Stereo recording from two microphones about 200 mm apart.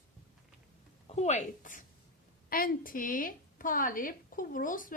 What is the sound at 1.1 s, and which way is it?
A woman's voice, 35° left (ahead or behind).